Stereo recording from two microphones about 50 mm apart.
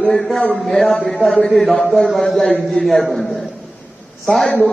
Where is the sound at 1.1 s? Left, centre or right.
Centre.